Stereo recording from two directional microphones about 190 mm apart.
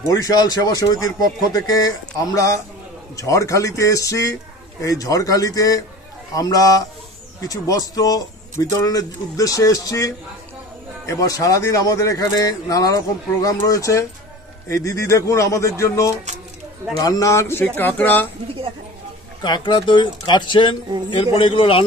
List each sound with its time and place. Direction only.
0.1 s speech: 20° left (ahead or behind)
19.4 s speech: 25° left (ahead or behind)